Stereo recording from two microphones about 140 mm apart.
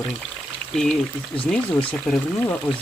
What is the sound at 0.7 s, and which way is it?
Speech, 5° left (ahead or behind).